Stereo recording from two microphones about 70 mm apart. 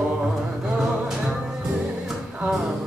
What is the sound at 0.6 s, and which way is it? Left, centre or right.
Music, centre.